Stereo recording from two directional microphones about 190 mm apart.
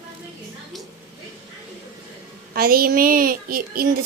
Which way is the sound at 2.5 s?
50° right (ahead or behind).